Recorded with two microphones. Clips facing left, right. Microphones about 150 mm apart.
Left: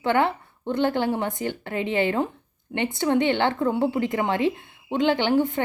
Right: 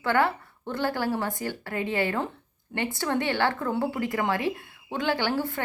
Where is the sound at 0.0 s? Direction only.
20° left (ahead or behind).